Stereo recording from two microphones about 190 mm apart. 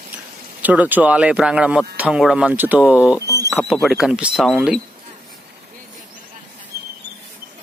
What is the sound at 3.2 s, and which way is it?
Horse, 15° left (ahead or behind).